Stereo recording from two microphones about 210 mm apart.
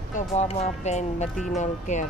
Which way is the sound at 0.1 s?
30° left (ahead or behind).